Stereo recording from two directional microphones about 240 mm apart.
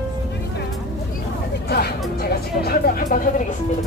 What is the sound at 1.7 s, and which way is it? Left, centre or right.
Music, left.